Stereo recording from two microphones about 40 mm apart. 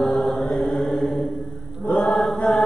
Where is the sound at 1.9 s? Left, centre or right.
Left.